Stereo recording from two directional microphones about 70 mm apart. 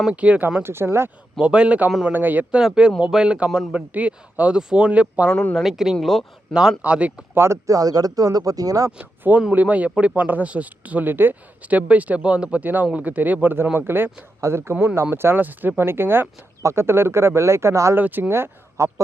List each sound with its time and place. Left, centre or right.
0.1 s speech: centre
0.6 s speech: right
1.4 s speech: centre
2.0 s speech: right
2.6 s speech: centre
5.3 s speech: centre
5.5 s speech: centre
7.3 s speech: right
7.8 s speech: right
9.5 s speech: right
17.9 s speech: right